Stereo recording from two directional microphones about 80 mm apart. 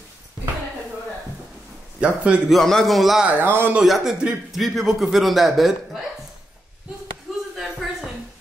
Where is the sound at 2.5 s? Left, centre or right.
Centre.